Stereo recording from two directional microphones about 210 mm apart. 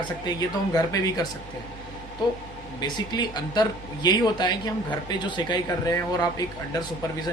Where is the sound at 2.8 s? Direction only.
20° left (ahead or behind).